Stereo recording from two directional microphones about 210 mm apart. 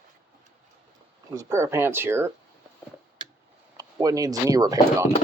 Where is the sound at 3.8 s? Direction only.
15° right (ahead or behind).